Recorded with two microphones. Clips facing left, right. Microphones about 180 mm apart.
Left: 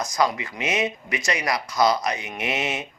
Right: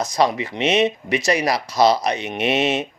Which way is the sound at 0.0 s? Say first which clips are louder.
Right 4 dB; 25° right (ahead or behind).